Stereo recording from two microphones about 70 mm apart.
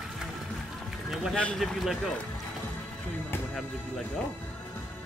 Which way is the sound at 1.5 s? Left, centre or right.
Centre.